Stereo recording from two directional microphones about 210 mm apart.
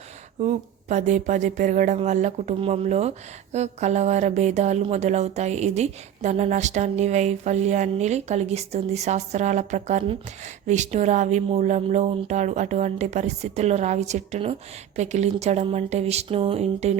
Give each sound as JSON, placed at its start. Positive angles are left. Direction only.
{"t": 0.3, "sound": "speech", "side_deg": -35}